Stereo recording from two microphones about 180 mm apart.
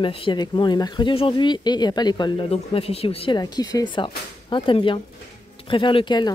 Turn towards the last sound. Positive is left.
turn(degrees=25)  # may be behind; listen again after turning